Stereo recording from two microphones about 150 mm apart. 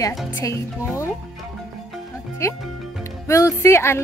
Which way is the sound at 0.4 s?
20° left (ahead or behind).